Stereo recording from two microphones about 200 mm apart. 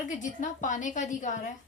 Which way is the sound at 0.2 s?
40° left (ahead or behind).